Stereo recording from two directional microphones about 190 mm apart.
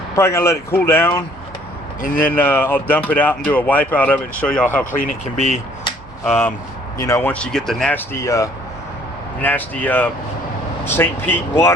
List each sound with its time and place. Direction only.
0.2 s speech: 15° left (ahead or behind)
2.0 s speech: 45° left (ahead or behind)
2.3 s speech: 10° left (ahead or behind)
4.9 s speech: 40° left (ahead or behind)
6.2 s speech: 5° left (ahead or behind)